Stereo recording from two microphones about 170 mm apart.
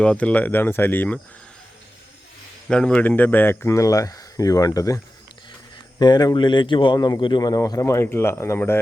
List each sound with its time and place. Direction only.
0.0 s speech: 5° left (ahead or behind)
2.6 s speech: 5° left (ahead or behind); by 4.9 s 20° left (ahead or behind)
6.0 s speech: 25° left (ahead or behind)